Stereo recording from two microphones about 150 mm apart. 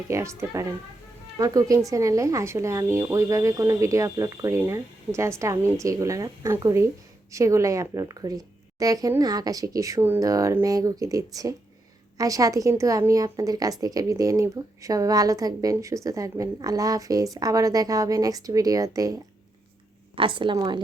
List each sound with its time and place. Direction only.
0.1 s a woman's voice: 20° right (ahead or behind)
20.1 s a woman's voice: 35° right (ahead or behind)